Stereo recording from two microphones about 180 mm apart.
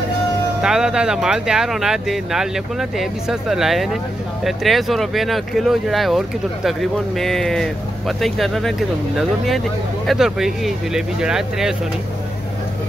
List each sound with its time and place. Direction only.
0.6 s speech: 5° right (ahead or behind)